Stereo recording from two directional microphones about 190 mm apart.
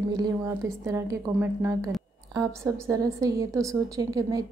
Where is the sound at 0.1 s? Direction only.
20° right (ahead or behind).